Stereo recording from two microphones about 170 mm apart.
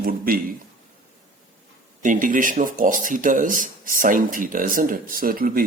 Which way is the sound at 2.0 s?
50° right (ahead or behind).